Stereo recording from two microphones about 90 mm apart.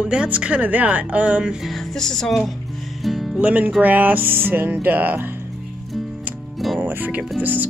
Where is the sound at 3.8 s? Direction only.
20° right (ahead or behind).